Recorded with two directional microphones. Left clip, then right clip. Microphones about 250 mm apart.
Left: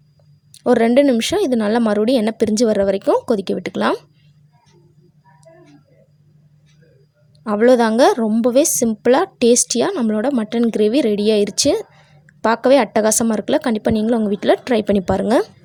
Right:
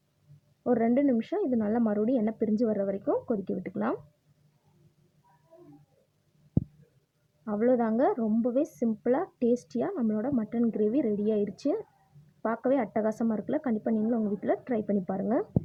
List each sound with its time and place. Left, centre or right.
0.6 s speech: left
7.4 s speech: left